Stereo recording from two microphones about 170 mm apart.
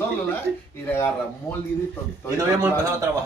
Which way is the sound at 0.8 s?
10° left (ahead or behind).